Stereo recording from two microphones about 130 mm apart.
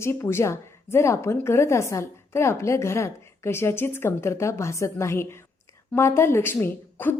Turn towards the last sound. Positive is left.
turn(degrees=15)  # may be behind; listen again after turning